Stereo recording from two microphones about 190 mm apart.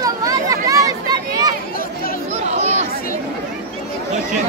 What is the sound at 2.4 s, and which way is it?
Chatter, 35° right (ahead or behind).